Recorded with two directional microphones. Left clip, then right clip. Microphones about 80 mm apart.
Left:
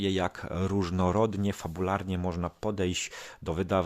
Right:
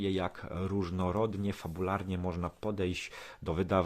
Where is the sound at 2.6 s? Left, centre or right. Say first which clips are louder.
Left 4 dB; left.